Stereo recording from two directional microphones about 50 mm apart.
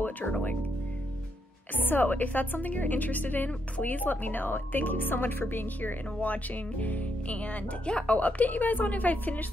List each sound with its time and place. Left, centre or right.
1.8 s speech: left